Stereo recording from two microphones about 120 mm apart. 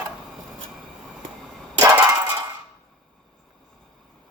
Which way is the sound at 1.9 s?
25° right (ahead or behind).